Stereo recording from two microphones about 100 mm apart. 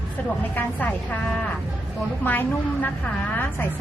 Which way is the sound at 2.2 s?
15° left (ahead or behind).